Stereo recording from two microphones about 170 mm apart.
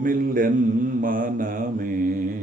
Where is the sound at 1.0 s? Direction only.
55° right (ahead or behind).